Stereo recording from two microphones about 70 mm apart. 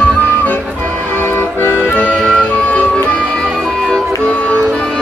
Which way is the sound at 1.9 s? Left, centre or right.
Centre.